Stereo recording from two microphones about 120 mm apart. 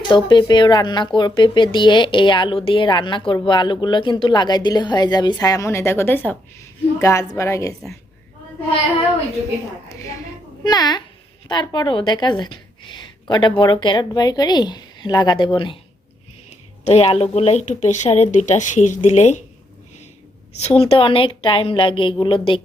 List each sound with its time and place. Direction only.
0.3 s a woman's voice: 40° left (ahead or behind); by 7.7 s 25° left (ahead or behind)
10.6 s a woman's voice: 35° left (ahead or behind)
16.8 s speech: 60° left (ahead or behind)
20.6 s a woman's voice: 55° left (ahead or behind)